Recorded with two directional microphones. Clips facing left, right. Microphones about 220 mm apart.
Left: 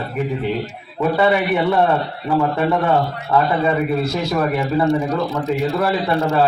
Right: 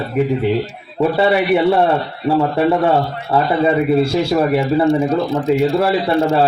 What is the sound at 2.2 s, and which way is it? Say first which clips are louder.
A man's voice: right 4 dB; 30° right (ahead or behind).